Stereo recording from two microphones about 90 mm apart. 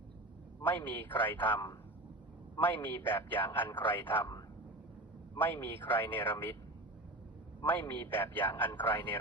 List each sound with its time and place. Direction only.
0.6 s a man's voice: 20° left (ahead or behind)
2.6 s a man's voice: 20° left (ahead or behind)
5.4 s a man's voice: 25° left (ahead or behind)
7.6 s a man's voice: 20° left (ahead or behind)